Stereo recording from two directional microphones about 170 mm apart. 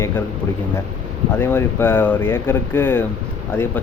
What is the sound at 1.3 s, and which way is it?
Speech, 15° left (ahead or behind).